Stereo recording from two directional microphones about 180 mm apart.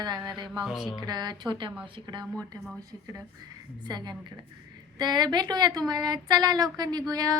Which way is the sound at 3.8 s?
25° right (ahead or behind).